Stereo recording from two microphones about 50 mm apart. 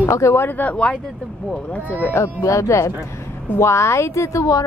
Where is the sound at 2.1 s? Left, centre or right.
Left.